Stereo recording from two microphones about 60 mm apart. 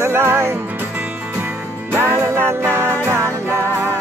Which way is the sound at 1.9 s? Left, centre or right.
Right.